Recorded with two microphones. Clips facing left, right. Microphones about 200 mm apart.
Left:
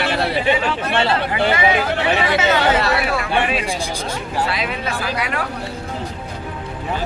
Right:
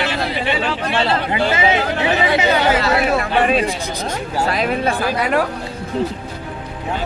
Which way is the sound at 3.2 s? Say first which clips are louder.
Right 4 dB; 40° right (ahead or behind).